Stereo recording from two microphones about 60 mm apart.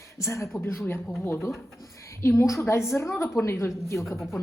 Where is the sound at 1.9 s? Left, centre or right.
Left.